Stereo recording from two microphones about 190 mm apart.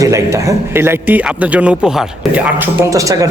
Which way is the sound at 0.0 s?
15° right (ahead or behind).